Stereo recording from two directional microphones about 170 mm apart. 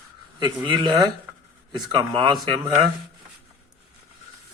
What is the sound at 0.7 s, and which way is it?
A man's voice, 25° right (ahead or behind).